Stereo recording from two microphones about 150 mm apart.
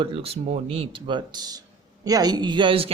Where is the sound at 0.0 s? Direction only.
40° right (ahead or behind).